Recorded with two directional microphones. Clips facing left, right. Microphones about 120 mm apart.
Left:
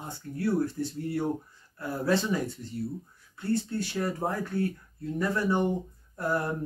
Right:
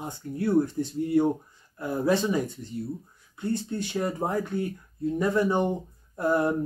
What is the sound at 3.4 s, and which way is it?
Speech, 20° right (ahead or behind).